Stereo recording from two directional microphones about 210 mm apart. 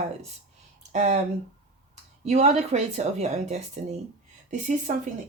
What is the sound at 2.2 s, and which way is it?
Speech, 30° right (ahead or behind).